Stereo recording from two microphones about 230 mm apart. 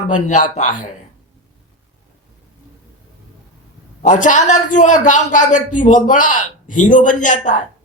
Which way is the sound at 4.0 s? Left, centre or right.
Left.